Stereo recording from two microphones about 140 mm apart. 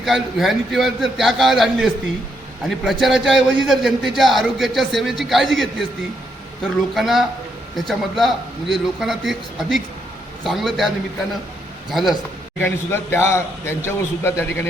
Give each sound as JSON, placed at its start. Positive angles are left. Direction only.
{"t": 0.0, "sound": "a man's voice", "side_deg": 0}
{"t": 6.9, "sound": "a man's voice", "side_deg": 0}
{"t": 12.5, "sound": "a man's voice", "side_deg": 15}